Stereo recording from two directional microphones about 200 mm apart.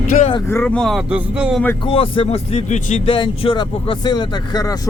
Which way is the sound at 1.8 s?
25° left (ahead or behind).